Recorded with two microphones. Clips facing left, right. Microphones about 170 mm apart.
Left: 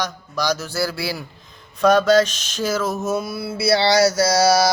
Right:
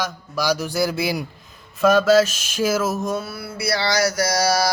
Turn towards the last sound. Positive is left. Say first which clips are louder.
# left 4 dB
turn(degrees=25)  # may be behind; listen again after turning